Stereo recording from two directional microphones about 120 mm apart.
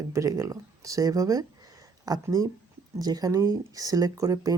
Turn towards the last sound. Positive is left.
turn(degrees=-30)  # may be behind; listen again after turning